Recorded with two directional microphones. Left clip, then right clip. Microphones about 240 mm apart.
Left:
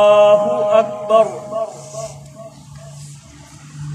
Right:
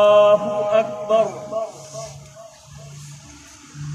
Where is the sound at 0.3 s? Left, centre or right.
Left.